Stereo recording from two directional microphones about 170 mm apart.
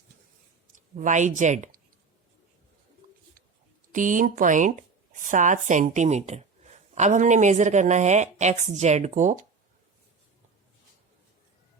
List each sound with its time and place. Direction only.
0.9 s speech: 45° right (ahead or behind)
3.9 s speech: 50° right (ahead or behind)